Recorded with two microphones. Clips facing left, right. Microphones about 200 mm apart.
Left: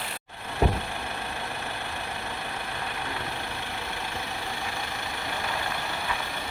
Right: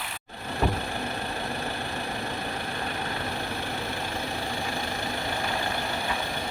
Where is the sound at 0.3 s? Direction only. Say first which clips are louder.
Left 1 dB; 35° right (ahead or behind).